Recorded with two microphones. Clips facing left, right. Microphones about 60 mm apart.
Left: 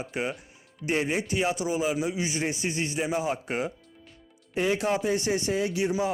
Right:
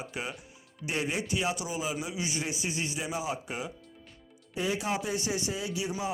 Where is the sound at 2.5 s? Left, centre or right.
Left.